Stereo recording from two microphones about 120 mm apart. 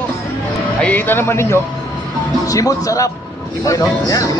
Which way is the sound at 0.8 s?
15° left (ahead or behind).